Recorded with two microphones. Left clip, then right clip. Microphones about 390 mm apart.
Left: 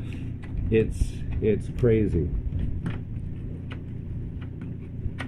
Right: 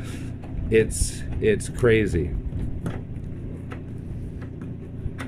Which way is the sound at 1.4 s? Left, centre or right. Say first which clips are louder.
Right 3 dB; right.